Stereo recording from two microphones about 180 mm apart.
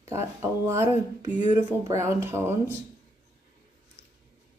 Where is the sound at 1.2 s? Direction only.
40° left (ahead or behind).